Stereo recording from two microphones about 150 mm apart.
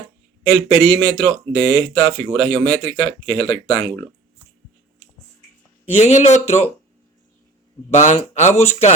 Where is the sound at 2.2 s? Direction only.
5° left (ahead or behind).